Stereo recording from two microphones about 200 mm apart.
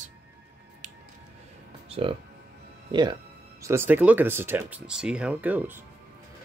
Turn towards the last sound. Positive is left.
turn(degrees=-10)  # may be behind; listen again after turning